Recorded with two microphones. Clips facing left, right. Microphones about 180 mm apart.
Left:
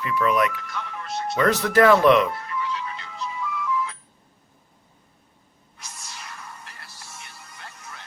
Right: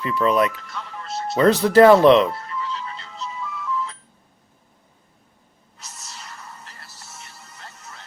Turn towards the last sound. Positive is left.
turn(degrees=0)  # may be behind; listen again after turning